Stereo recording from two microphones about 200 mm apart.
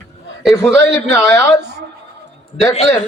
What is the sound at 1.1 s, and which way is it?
Speech, 15° left (ahead or behind).